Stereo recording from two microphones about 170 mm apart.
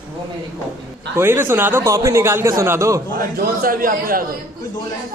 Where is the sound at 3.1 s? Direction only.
60° right (ahead or behind).